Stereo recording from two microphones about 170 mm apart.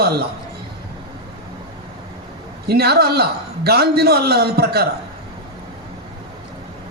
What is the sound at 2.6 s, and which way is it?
A man's voice, 70° right (ahead or behind).